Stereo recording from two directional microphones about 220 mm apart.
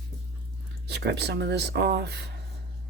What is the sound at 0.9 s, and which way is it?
Speech, 50° right (ahead or behind).